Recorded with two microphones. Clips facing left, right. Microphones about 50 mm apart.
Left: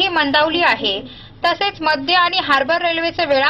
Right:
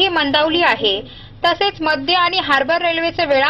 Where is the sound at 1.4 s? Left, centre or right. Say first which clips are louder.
Right 1 dB; right.